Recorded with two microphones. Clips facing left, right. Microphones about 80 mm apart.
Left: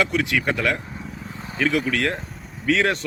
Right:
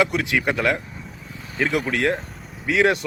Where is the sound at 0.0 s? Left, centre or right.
Right.